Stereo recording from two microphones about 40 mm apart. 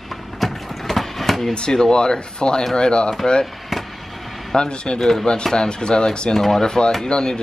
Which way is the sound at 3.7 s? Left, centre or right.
Centre.